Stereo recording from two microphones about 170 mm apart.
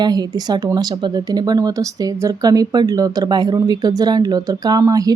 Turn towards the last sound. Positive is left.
turn(degrees=-20)  # may be behind; listen again after turning